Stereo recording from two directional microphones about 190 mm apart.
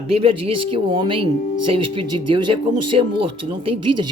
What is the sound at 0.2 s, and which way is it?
Speech, 30° right (ahead or behind).